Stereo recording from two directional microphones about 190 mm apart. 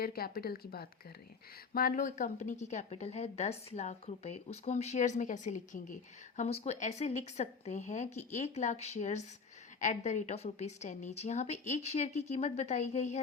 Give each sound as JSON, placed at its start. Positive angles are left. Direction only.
{"t": 0.0, "sound": "a woman's voice", "side_deg": 50}